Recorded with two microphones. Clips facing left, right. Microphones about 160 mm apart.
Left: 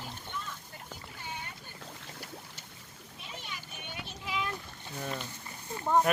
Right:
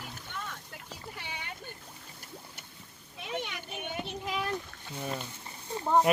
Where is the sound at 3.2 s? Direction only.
70° right (ahead or behind).